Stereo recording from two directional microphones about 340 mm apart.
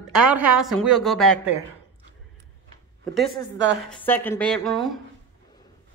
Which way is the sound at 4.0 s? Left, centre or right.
Centre.